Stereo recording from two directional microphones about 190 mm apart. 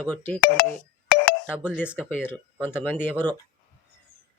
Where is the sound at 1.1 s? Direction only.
50° left (ahead or behind).